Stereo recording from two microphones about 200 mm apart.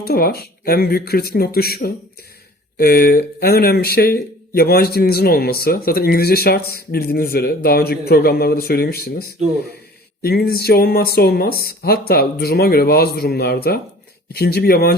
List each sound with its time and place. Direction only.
0.0 s speech: 50° left (ahead or behind)
10.2 s speech: 50° left (ahead or behind)